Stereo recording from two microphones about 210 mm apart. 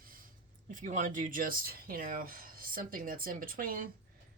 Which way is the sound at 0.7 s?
35° right (ahead or behind).